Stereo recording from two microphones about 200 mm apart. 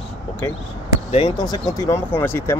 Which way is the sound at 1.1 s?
25° left (ahead or behind).